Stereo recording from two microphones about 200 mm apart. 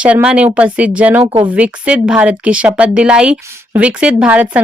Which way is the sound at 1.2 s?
30° right (ahead or behind).